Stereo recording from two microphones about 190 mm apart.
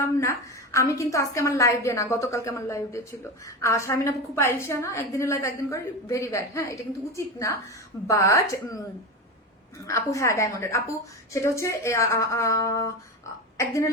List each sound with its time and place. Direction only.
0.2 s a woman's voice: 15° left (ahead or behind)
9.8 s a woman's voice: 15° left (ahead or behind)